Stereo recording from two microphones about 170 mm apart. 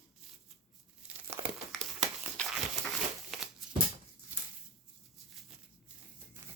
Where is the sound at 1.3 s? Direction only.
15° right (ahead or behind).